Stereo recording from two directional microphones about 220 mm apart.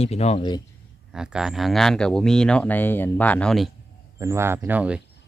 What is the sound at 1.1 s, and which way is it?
Speech, 5° right (ahead or behind).